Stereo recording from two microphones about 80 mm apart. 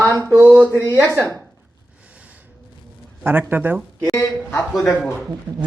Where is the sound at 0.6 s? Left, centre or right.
Left.